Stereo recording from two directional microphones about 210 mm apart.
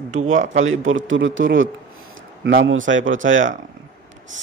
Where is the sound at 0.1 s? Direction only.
35° right (ahead or behind).